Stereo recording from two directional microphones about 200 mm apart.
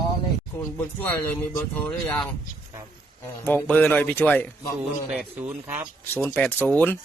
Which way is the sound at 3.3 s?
10° left (ahead or behind).